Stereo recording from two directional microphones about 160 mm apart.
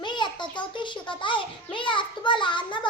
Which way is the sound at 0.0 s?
30° left (ahead or behind).